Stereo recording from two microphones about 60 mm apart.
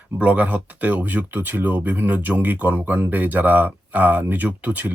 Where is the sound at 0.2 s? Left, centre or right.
Right.